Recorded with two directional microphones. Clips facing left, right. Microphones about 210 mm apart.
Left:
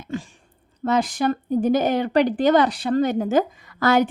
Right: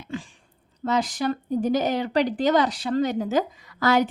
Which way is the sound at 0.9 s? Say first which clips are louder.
Left 3 dB; 55° left (ahead or behind).